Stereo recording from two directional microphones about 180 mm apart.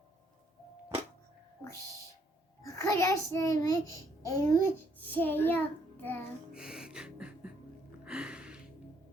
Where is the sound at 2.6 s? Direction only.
15° left (ahead or behind).